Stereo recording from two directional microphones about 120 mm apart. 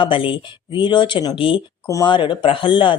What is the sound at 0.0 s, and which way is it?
A woman's voice, 45° left (ahead or behind).